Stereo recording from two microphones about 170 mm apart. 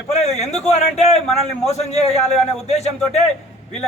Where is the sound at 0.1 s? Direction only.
40° left (ahead or behind).